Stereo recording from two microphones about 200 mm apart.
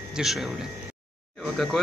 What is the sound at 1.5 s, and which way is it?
Speech, centre (ahead or behind).